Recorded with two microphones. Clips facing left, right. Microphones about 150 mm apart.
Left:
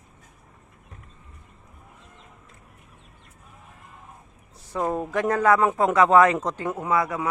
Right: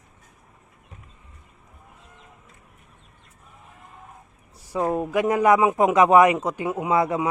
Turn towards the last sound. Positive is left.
turn(degrees=-25)  # may be behind; listen again after turning